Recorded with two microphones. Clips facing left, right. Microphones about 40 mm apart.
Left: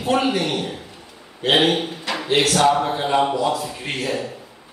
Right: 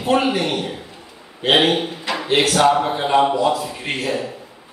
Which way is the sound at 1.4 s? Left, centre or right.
Centre.